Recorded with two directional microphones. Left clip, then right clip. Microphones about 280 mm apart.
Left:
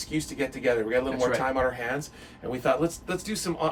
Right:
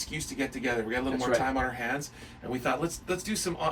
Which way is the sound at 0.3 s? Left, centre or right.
Centre.